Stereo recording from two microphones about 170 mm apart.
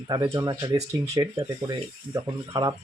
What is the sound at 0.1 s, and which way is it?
Speech, 20° right (ahead or behind).